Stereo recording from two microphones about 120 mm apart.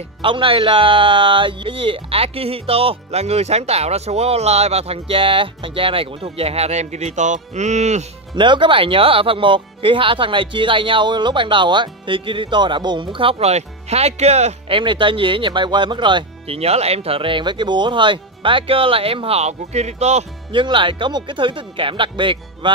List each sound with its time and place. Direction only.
0.2 s speech: 45° right (ahead or behind); by 8.0 s 75° right (ahead or behind)
8.4 s speech: 45° right (ahead or behind); by 14.8 s 65° right (ahead or behind)
14.8 s speech: 45° right (ahead or behind)
16.5 s speech: 60° right (ahead or behind)
20.5 s speech: 45° right (ahead or behind)